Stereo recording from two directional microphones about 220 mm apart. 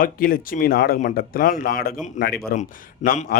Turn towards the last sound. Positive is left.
turn(degrees=40)  # may be behind; listen again after turning